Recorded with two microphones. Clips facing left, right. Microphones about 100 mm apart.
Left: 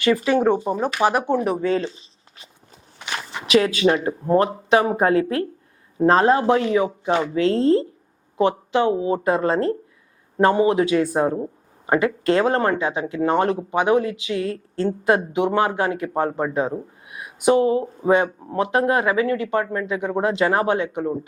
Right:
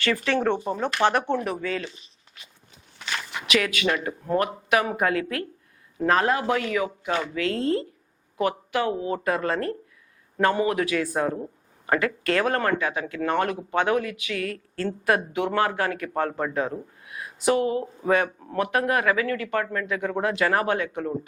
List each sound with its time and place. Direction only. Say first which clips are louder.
0.3 s speech: left 5 dB; 10° left (ahead or behind)